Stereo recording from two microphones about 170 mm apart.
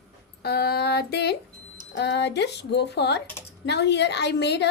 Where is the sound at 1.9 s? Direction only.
90° left.